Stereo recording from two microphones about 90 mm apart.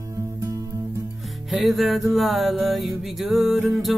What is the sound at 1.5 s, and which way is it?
Music, centre (ahead or behind).